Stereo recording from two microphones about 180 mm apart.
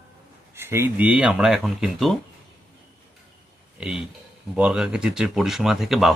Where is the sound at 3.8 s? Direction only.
5° right (ahead or behind).